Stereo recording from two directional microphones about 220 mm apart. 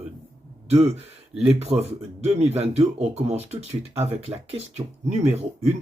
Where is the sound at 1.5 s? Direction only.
30° right (ahead or behind).